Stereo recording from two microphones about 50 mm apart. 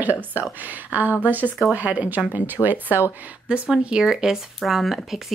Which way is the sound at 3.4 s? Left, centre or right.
Right.